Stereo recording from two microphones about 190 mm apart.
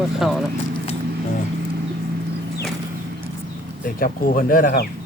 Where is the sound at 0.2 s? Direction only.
Centre (ahead or behind).